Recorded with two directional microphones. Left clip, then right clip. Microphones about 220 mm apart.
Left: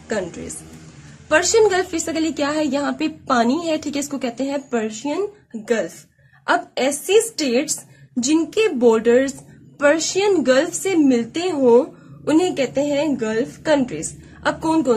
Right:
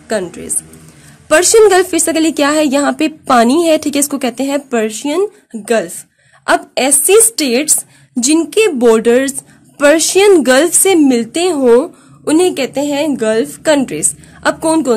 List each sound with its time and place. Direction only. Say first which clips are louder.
0.1 s a woman's voice: right 7 dB; 40° right (ahead or behind)
1.3 s a woman's voice: right 8 dB; 50° right (ahead or behind)
6.4 s a woman's voice: right 6 dB; 45° right (ahead or behind)